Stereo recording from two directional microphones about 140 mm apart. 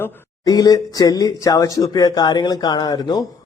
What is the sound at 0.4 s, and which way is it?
Speech, 25° left (ahead or behind).